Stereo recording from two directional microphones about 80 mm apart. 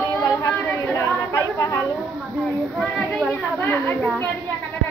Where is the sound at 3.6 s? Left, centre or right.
Left.